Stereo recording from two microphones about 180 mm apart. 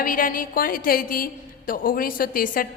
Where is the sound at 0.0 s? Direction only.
50° left (ahead or behind).